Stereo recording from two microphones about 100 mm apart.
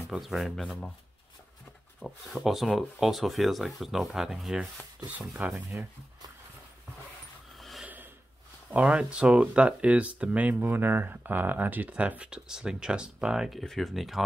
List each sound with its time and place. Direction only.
0.1 s speech: centre (ahead or behind)
2.0 s speech: centre (ahead or behind)
7.5 s a sound: centre (ahead or behind)
7.8 s rub: 20° right (ahead or behind)
8.7 s speech: 10° right (ahead or behind)